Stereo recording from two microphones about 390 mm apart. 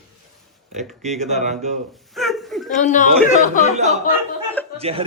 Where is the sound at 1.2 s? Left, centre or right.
Centre.